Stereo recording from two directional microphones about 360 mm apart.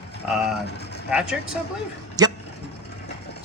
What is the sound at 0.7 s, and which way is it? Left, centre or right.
Vehicle, left.